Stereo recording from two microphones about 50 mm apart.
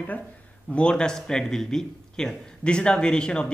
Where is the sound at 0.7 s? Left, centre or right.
Centre.